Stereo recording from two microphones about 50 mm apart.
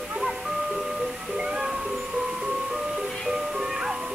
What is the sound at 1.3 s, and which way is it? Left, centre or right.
Music, centre.